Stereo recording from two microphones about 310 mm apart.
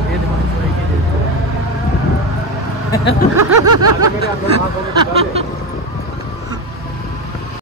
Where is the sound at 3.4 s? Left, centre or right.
Right.